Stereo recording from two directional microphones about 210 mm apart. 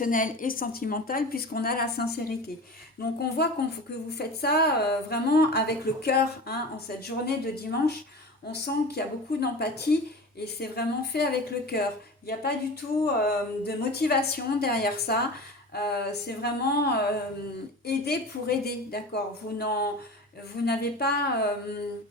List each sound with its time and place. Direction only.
0.0 s speech: 40° left (ahead or behind)